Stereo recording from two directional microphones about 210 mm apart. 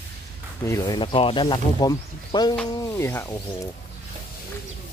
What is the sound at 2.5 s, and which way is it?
Speech, 5° left (ahead or behind).